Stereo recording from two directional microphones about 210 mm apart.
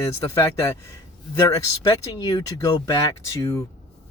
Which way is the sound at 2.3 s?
15° left (ahead or behind).